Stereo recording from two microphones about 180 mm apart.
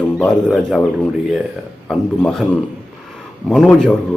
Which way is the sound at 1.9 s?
Centre (ahead or behind).